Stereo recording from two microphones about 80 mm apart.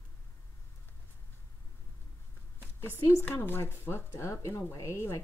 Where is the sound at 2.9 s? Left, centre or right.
Left.